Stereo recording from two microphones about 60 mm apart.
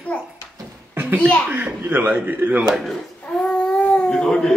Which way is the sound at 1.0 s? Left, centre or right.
Right.